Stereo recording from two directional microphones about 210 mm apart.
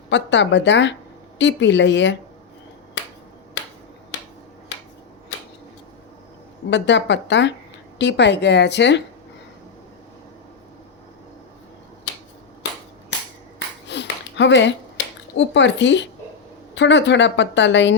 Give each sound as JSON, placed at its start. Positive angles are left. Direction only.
{"t": 0.1, "sound": "speech", "side_deg": 60}
{"t": 6.7, "sound": "speech", "side_deg": 60}
{"t": 13.8, "sound": "a sound", "side_deg": 55}
{"t": 16.7, "sound": "speech", "side_deg": 60}